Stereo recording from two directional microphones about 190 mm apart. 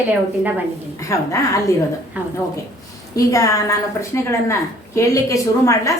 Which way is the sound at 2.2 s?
10° right (ahead or behind).